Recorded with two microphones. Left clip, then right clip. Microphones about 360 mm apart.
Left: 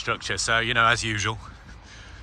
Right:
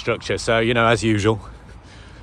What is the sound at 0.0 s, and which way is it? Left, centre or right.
Speech, centre.